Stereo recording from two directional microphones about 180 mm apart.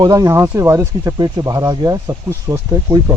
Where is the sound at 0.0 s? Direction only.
20° right (ahead or behind).